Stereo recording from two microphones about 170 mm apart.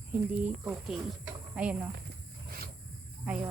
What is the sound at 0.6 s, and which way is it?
A woman's voice, 10° right (ahead or behind).